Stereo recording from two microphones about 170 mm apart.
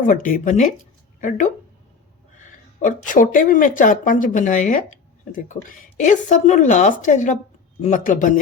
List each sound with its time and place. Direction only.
0.0 s speech: 50° left (ahead or behind)
2.7 s speech: 50° left (ahead or behind)